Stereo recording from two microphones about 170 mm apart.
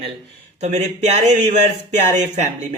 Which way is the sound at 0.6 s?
40° right (ahead or behind).